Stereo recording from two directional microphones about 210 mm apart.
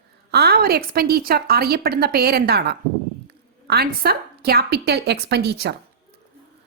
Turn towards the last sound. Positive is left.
turn(degrees=-50)  # may be behind; listen again after turning